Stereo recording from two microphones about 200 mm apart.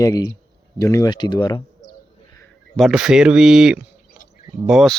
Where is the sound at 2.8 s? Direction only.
Centre (ahead or behind).